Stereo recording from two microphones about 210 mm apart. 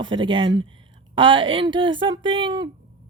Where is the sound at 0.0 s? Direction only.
20° right (ahead or behind).